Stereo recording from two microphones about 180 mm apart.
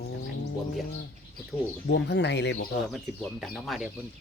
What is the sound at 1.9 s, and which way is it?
Speech, 75° left (ahead or behind).